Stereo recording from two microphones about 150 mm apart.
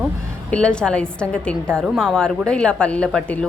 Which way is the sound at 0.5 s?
5° left (ahead or behind).